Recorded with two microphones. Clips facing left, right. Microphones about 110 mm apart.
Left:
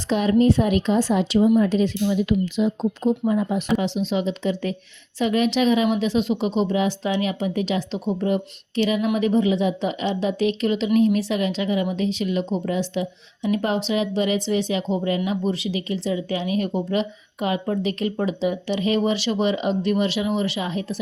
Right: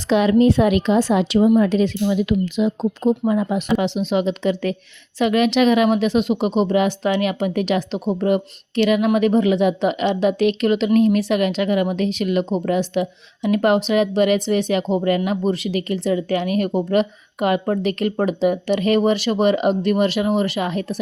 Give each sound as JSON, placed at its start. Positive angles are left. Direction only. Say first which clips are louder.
{"t": 0.1, "sound": "a woman's voice", "louder": "right 3 dB", "side_deg": -90}
{"t": 2.6, "sound": "speech", "louder": "right 2 dB", "side_deg": -85}
{"t": 3.8, "sound": "speech", "louder": "right 3 dB", "side_deg": -65}